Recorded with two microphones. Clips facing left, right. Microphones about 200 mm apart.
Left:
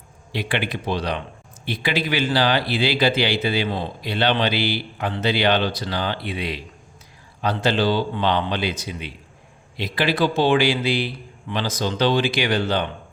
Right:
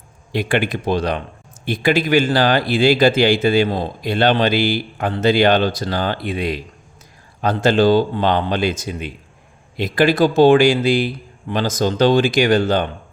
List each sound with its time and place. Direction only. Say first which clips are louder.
0.3 s speech: right 6 dB; 45° right (ahead or behind)